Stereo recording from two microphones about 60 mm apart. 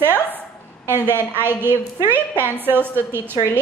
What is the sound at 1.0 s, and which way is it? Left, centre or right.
A woman's voice, right.